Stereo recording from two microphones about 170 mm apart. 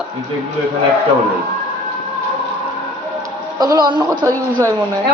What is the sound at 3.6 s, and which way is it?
Speech, 25° right (ahead or behind).